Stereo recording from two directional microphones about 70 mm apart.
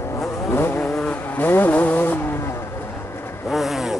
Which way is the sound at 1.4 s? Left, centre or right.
Left.